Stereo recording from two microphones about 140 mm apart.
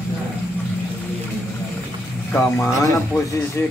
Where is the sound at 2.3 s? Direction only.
20° left (ahead or behind).